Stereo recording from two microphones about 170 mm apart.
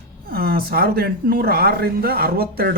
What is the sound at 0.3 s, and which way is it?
Speech, 60° right (ahead or behind).